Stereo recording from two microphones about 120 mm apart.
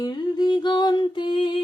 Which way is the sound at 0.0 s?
35° left (ahead or behind).